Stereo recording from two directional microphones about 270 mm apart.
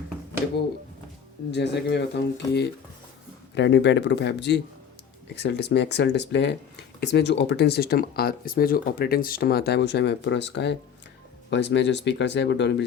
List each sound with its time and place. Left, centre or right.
1.5 s speech: left